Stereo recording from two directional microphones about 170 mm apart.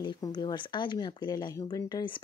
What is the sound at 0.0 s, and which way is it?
Speech, 25° left (ahead or behind).